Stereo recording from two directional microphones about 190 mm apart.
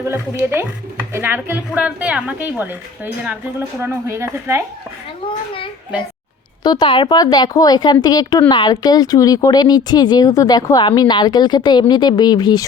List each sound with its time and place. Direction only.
0.5 s speech: 10° right (ahead or behind)
6.6 s speech: 20° left (ahead or behind)